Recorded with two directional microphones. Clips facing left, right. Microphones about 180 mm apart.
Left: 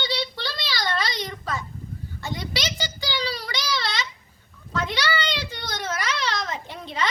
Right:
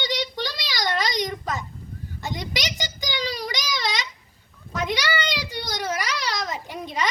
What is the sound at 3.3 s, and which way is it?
Child singing, 15° right (ahead or behind).